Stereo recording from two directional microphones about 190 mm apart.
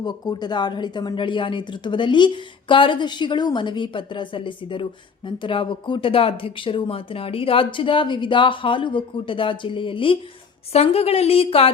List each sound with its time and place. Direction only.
0.0 s a woman's voice: 20° left (ahead or behind)